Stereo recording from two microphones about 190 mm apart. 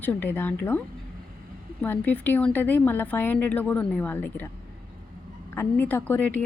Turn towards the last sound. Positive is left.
turn(degrees=10)  # may be behind; listen again after turning